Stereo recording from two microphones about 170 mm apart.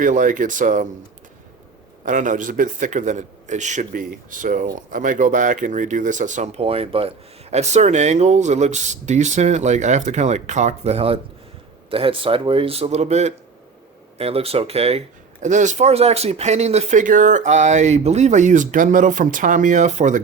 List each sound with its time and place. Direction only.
0.0 s speech: 50° right (ahead or behind)
2.0 s speech: 50° right (ahead or behind)